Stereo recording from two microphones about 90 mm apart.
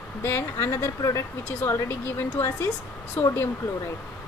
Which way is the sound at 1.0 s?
35° left (ahead or behind).